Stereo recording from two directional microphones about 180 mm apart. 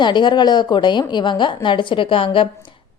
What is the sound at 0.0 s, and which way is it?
A woman's voice, 25° left (ahead or behind).